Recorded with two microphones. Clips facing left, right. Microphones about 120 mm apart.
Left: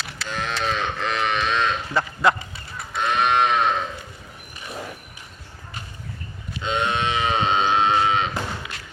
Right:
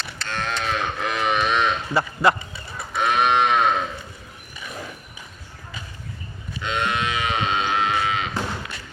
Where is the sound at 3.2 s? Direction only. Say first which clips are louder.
Even; 5° right (ahead or behind).